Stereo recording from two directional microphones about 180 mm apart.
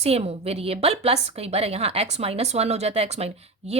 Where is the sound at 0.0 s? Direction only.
35° right (ahead or behind).